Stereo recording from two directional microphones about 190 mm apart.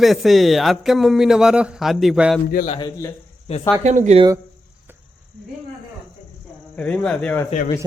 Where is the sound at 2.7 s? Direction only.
25° left (ahead or behind).